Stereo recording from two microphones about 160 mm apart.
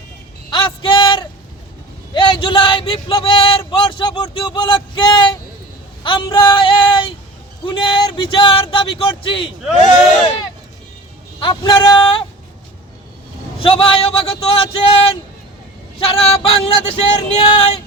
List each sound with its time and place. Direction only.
0.5 s a sound: 30° left (ahead or behind)
3.7 s speech: 30° left (ahead or behind)
6.0 s female singing: 30° left (ahead or behind)
7.6 s speech: 30° left (ahead or behind)
11.3 s female singing: 25° left (ahead or behind)
13.6 s speech: 35° left (ahead or behind)
16.1 s speech: 35° left (ahead or behind)